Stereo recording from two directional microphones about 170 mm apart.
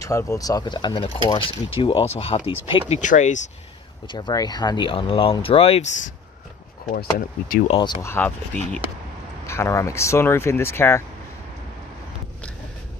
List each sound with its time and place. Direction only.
0.0 s speech: 20° left (ahead or behind)
2.9 s speech: 45° left (ahead or behind)
4.1 s speech: 25° left (ahead or behind); by 6.1 s 45° left (ahead or behind)
7.6 s speech: 30° left (ahead or behind)
8.1 s speech: 10° left (ahead or behind)